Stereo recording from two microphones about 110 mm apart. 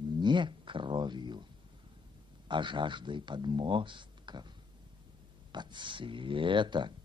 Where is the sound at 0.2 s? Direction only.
45° right (ahead or behind).